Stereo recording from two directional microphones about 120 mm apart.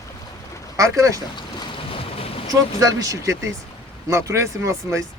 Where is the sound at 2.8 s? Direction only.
30° right (ahead or behind).